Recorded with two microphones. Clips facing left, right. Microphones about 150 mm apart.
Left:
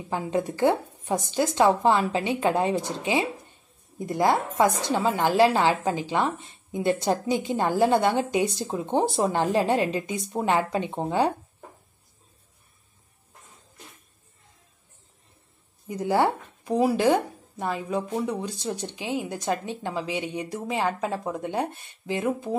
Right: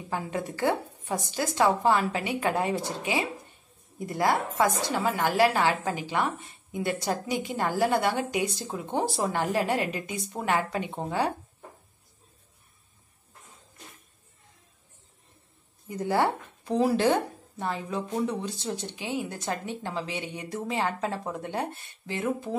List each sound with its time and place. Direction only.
0.1 s a woman's voice: 20° left (ahead or behind)
15.9 s a woman's voice: 20° left (ahead or behind)